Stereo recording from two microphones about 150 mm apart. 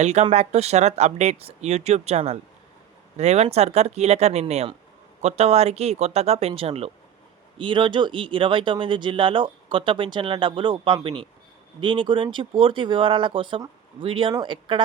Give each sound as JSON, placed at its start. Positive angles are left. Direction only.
{"t": 0.0, "sound": "speech", "side_deg": -50}